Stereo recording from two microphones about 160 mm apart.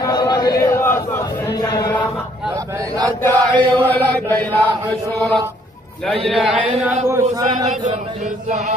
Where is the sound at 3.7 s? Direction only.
10° left (ahead or behind).